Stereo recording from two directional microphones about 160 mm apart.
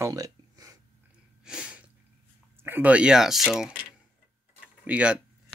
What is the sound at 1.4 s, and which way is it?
Sneeze, 5° right (ahead or behind).